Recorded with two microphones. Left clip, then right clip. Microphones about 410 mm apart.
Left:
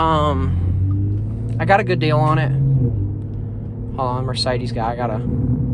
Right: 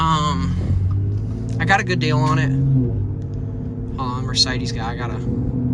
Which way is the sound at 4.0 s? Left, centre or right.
Centre.